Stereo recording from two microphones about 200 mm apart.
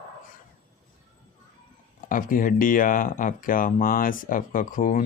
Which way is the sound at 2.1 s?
45° left (ahead or behind).